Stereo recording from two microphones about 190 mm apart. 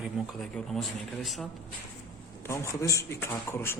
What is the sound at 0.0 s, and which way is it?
A man's voice, centre (ahead or behind).